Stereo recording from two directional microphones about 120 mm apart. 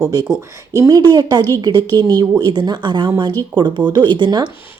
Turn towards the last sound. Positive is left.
turn(degrees=-40)  # may be behind; listen again after turning